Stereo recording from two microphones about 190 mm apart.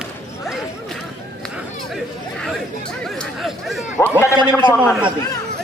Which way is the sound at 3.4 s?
Centre (ahead or behind).